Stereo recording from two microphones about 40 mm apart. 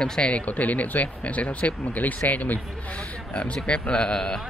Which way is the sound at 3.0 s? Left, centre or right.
Left.